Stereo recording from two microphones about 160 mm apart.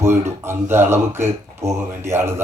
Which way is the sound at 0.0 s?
15° right (ahead or behind).